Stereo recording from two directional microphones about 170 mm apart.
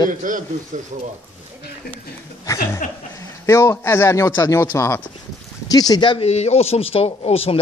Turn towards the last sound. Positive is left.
turn(degrees=35)  # may be behind; listen again after turning